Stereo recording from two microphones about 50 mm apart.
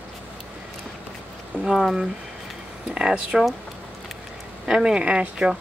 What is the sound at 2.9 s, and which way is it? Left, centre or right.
Speech, centre.